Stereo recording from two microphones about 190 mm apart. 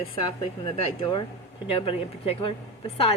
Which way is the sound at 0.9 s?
25° left (ahead or behind).